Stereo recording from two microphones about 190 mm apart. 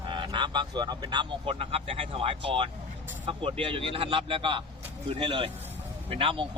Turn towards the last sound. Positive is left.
turn(degrees=-30)  # may be behind; listen again after turning